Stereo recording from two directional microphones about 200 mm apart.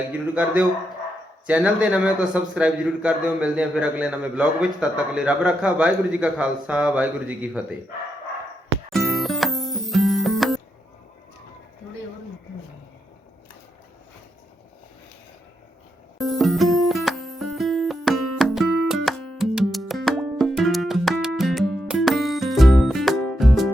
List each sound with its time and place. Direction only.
0.1 s a man's voice: 10° right (ahead or behind)
8.9 s music: centre (ahead or behind)
16.1 s music: centre (ahead or behind)